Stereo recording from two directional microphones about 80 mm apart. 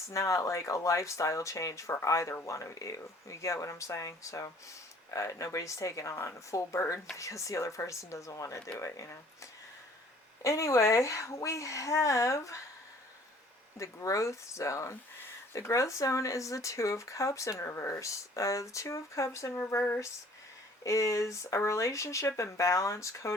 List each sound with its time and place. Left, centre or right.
0.1 s speech: left
13.7 s speech: left
20.8 s speech: left